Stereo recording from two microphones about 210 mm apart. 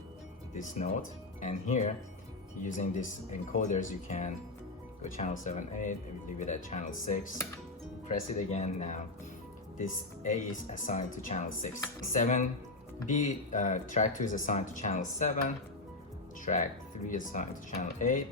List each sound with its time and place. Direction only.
0.5 s speech: 35° left (ahead or behind)